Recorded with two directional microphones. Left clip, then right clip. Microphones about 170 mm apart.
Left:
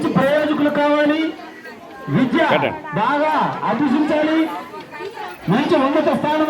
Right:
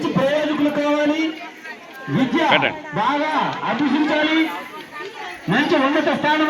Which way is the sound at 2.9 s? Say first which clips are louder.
Left 4 dB; 40° right (ahead or behind).